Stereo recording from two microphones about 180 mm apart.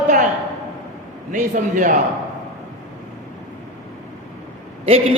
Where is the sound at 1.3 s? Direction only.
45° right (ahead or behind).